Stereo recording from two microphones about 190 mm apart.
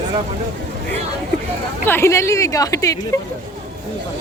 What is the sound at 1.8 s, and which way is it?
A woman's voice, 10° left (ahead or behind).